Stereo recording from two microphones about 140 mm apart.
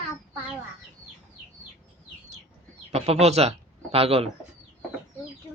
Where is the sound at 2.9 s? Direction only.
50° right (ahead or behind).